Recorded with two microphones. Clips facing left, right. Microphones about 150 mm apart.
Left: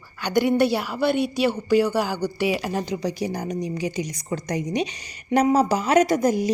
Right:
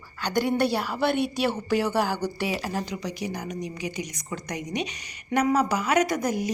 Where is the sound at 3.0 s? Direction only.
35° left (ahead or behind).